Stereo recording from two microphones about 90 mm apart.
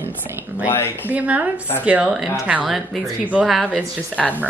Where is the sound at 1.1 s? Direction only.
15° right (ahead or behind).